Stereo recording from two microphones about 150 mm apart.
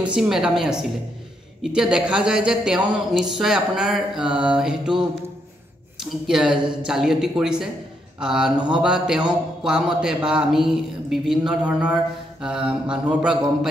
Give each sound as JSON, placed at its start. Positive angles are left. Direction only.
{"t": 0.0, "sound": "speech", "side_deg": -5}
{"t": 8.5, "sound": "a man's voice", "side_deg": -30}
{"t": 8.8, "sound": "speech", "side_deg": -5}